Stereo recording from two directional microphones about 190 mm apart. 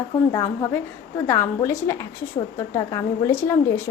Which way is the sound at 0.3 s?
15° left (ahead or behind).